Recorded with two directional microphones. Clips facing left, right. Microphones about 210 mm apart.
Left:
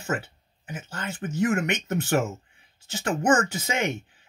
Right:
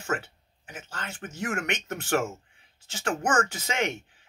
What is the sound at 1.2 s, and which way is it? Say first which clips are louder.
Speech: left 8 dB; 20° left (ahead or behind).